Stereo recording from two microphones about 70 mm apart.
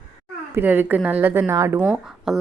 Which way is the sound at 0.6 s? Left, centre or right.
Right.